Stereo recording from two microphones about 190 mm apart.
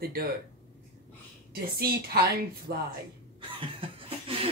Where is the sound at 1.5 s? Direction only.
55° right (ahead or behind).